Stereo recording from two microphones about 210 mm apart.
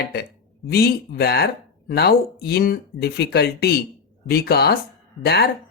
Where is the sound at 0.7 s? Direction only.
50° left (ahead or behind).